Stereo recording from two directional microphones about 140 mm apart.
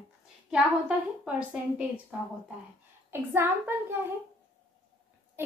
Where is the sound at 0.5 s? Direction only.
5° right (ahead or behind).